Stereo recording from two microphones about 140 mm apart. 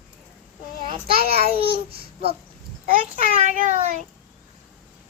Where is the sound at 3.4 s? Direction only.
55° right (ahead or behind).